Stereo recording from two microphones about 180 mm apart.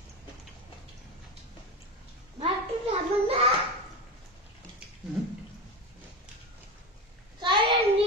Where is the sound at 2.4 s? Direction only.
35° right (ahead or behind).